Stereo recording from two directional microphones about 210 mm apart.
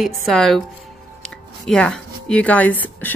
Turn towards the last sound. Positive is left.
turn(degrees=10)  # may be behind; listen again after turning